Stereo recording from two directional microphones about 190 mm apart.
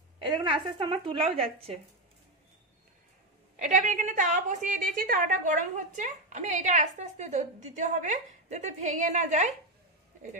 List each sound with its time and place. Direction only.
0.2 s speech: 30° right (ahead or behind)
3.5 s a woman's voice: 40° right (ahead or behind)